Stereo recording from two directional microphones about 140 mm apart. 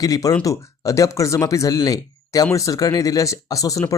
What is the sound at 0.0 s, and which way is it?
Speech, 25° left (ahead or behind).